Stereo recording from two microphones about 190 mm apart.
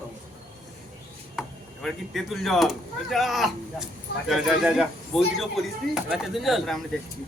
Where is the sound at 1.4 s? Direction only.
Centre (ahead or behind).